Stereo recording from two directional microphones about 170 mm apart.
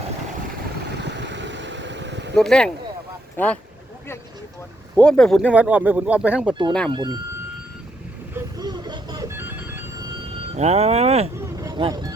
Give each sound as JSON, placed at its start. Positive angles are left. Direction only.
{"t": 0.9, "sound": "vehicle", "side_deg": -90}
{"t": 2.3, "sound": "speech", "side_deg": 5}
{"t": 4.9, "sound": "speech", "side_deg": 5}
{"t": 5.5, "sound": "speech", "side_deg": -10}
{"t": 6.9, "sound": "speech", "side_deg": -25}
{"t": 8.3, "sound": "vehicle", "side_deg": -15}
{"t": 8.6, "sound": "music", "side_deg": -25}
{"t": 10.5, "sound": "speech", "side_deg": -40}
{"t": 11.3, "sound": "vehicle", "side_deg": -20}
{"t": 11.8, "sound": "speech", "side_deg": -25}